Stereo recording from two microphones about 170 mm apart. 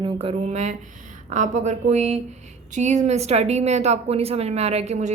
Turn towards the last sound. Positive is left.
turn(degrees=-40)  # may be behind; listen again after turning